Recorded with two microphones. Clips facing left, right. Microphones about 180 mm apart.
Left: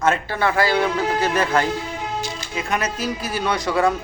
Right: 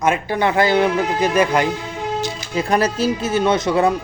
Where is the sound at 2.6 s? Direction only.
35° right (ahead or behind).